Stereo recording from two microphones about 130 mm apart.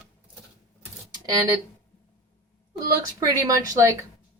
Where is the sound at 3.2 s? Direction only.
25° right (ahead or behind).